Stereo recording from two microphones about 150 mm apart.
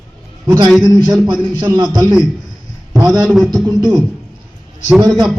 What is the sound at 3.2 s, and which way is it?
Speech, centre (ahead or behind).